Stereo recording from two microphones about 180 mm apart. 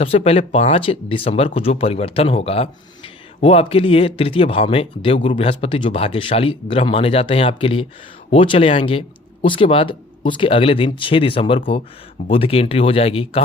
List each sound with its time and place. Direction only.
0.0 s speech: 35° left (ahead or behind)